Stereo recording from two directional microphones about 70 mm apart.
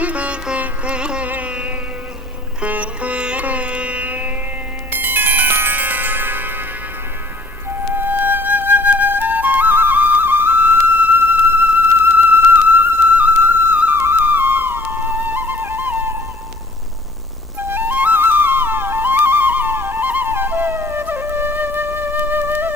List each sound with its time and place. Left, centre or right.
0.0 s music: centre
2.6 s sitar: centre
4.9 s music: right
7.7 s flute: right
17.7 s flute: right